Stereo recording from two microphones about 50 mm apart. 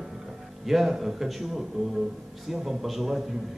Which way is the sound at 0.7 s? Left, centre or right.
Centre.